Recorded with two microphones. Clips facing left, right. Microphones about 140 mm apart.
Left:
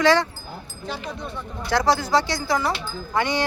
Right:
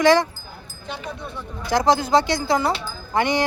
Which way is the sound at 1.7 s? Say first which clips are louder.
Right 2 dB; 20° right (ahead or behind).